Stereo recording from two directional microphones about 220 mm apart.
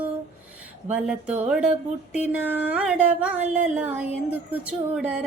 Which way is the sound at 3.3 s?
35° right (ahead or behind).